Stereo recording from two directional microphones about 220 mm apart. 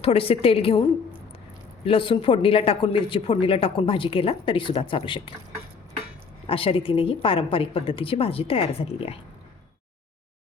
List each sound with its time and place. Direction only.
0.0 s speech: 25° left (ahead or behind)
6.5 s speech: 25° left (ahead or behind)